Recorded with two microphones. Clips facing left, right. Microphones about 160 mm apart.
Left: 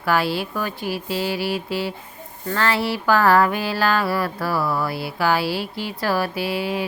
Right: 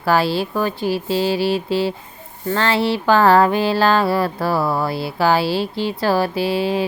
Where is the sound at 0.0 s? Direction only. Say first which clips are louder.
Right 4 dB; 30° right (ahead or behind).